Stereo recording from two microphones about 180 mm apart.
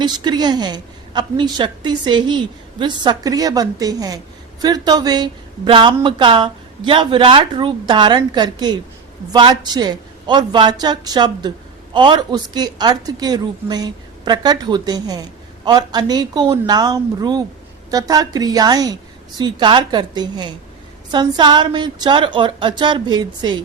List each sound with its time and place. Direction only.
0.0 s a woman's voice: 25° right (ahead or behind)